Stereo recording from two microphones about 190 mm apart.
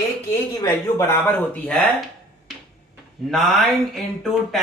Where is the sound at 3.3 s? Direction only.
Centre (ahead or behind).